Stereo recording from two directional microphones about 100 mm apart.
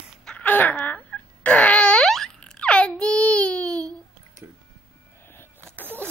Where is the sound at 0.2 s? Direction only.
10° left (ahead or behind).